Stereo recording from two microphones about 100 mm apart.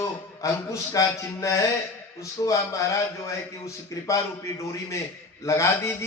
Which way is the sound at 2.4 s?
35° left (ahead or behind).